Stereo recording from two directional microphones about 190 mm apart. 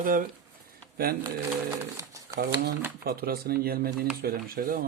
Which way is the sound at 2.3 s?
60° right (ahead or behind).